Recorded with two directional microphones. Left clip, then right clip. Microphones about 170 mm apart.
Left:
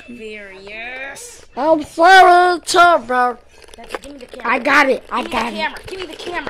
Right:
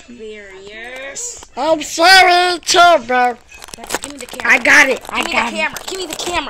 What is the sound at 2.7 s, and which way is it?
Speech, 5° right (ahead or behind).